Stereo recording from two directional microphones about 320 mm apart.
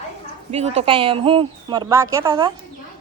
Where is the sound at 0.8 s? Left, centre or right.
Centre.